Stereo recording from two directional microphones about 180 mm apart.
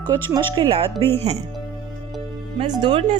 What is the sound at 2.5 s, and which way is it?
Speech, 25° right (ahead or behind).